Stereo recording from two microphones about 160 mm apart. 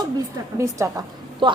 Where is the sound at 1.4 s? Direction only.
30° right (ahead or behind).